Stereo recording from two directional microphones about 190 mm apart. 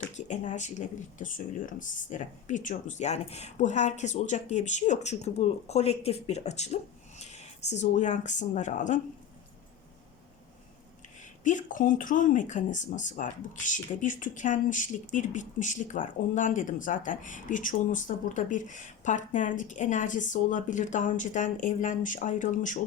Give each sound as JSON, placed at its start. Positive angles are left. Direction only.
{"t": 0.1, "sound": "speech", "side_deg": 40}
{"t": 11.4, "sound": "speech", "side_deg": 45}